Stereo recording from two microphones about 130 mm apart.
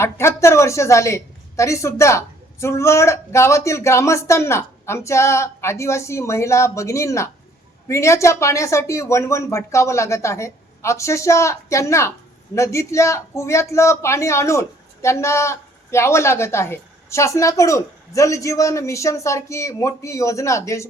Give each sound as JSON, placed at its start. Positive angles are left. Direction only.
{"t": 0.0, "sound": "speech", "side_deg": 20}